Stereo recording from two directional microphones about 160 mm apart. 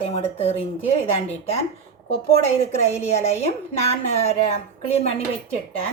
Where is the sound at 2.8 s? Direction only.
40° left (ahead or behind).